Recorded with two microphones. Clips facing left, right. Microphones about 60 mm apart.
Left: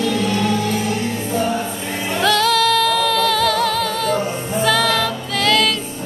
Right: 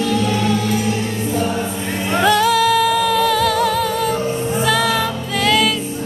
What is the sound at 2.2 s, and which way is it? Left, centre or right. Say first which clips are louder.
Music: right 2 dB; centre.